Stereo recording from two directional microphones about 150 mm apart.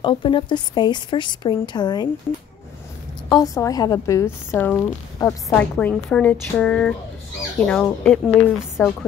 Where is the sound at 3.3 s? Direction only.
25° left (ahead or behind).